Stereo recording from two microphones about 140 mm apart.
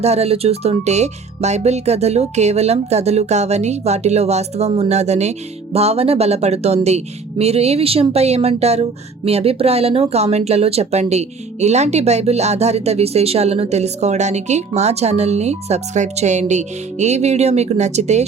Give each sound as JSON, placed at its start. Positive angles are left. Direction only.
{"t": 0.0, "sound": "speech", "side_deg": -50}